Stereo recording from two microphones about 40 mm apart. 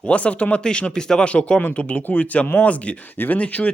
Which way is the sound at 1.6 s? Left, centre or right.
Left.